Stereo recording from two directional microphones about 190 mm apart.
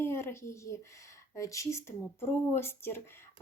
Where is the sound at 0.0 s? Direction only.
15° left (ahead or behind).